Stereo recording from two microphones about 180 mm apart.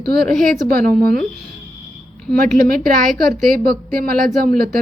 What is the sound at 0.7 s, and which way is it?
Speech, 50° right (ahead or behind).